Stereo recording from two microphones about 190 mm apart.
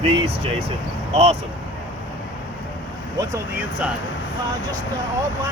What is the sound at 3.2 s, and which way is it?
Speech, 10° right (ahead or behind).